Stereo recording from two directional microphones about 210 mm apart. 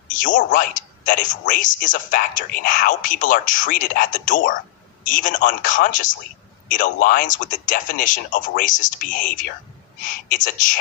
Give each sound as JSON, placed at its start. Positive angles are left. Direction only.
{"t": 0.1, "sound": "speech", "side_deg": 40}